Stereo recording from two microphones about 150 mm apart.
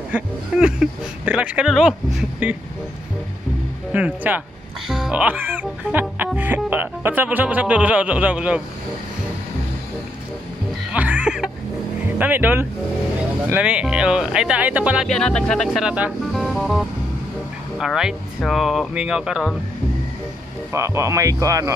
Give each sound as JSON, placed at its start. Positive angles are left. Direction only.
{"t": 0.1, "sound": "speech", "side_deg": -5}
{"t": 3.9, "sound": "speech", "side_deg": -10}
{"t": 10.9, "sound": "music", "side_deg": -10}
{"t": 12.2, "sound": "speech", "side_deg": -10}
{"t": 15.0, "sound": "speech", "side_deg": 5}
{"t": 20.7, "sound": "speech", "side_deg": -20}